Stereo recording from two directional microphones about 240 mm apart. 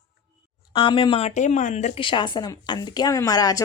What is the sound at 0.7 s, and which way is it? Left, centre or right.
A woman's voice, left.